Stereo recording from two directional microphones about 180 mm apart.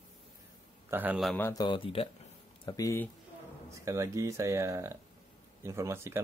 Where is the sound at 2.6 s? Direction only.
20° left (ahead or behind).